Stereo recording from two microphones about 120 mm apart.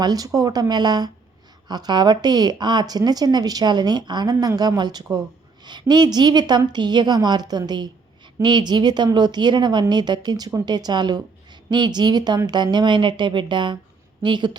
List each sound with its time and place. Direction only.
0.0 s a woman's voice: 30° right (ahead or behind)